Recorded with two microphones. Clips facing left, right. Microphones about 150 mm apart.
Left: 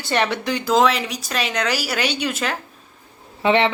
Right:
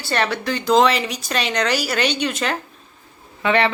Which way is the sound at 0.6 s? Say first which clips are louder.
Right 2 dB; 5° left (ahead or behind).